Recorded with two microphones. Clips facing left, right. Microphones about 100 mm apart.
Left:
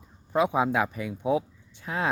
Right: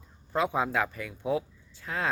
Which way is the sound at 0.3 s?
15° left (ahead or behind).